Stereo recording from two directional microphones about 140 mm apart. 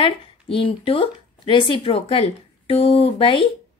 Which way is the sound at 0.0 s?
40° left (ahead or behind).